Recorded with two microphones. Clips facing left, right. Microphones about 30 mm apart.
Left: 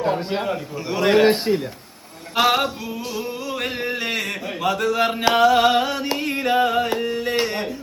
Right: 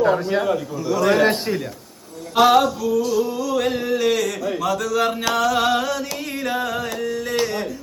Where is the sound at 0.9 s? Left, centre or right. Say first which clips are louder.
Even; left.